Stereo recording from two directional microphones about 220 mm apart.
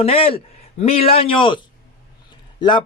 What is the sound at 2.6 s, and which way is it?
Speech, 20° left (ahead or behind).